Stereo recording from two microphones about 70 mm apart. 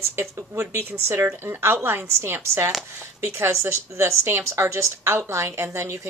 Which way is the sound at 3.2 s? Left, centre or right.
Right.